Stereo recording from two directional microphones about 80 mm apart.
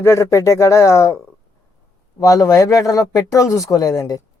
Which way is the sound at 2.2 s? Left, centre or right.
Left.